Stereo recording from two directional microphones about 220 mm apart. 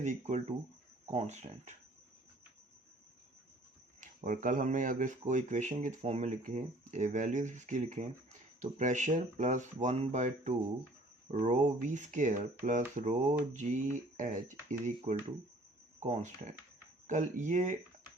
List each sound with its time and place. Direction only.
0.0 s speech: 30° right (ahead or behind)
4.0 s speech: 35° right (ahead or behind)